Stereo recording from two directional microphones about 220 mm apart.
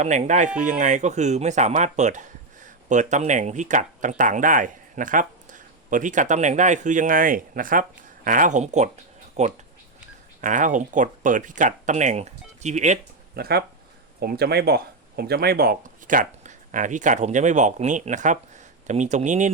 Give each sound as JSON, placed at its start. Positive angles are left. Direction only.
{"t": 0.0, "sound": "speech", "side_deg": -30}
{"t": 13.3, "sound": "speech", "side_deg": -45}